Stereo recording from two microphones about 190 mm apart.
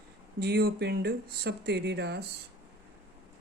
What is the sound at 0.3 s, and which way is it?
Speech, 60° right (ahead or behind).